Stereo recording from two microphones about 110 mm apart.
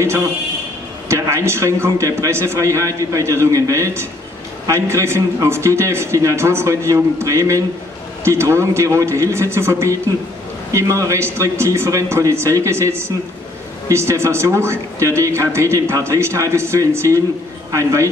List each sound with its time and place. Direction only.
1.0 s a man's voice: 25° right (ahead or behind)